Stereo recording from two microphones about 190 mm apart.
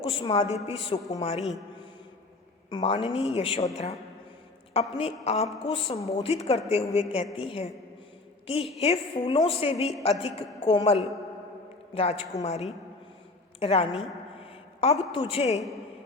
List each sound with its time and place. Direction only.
0.0 s a man's voice: 25° left (ahead or behind)
2.6 s a woman's voice: 25° left (ahead or behind)
4.7 s a woman's voice: 30° left (ahead or behind)
6.0 s a woman's voice: 15° left (ahead or behind)
6.2 s a woman's voice: 30° left (ahead or behind)